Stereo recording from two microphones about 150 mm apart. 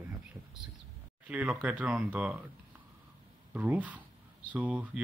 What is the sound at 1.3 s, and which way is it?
Speech, 10° right (ahead or behind).